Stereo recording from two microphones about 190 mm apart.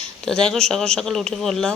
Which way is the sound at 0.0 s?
5° left (ahead or behind).